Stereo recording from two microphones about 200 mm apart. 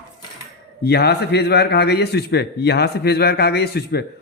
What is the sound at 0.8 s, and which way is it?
A man's voice, 55° left (ahead or behind).